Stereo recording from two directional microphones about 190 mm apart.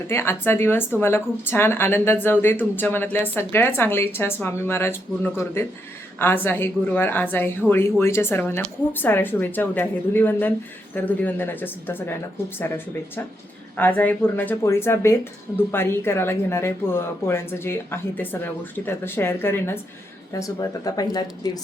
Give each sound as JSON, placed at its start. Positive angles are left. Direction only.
{"t": 0.1, "sound": "speech", "side_deg": 15}